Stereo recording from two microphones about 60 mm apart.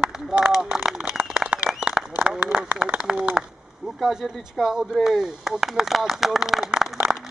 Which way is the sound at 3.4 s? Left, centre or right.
Centre.